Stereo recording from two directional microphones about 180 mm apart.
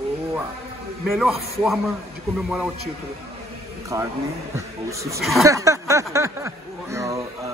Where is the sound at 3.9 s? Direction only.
20° right (ahead or behind).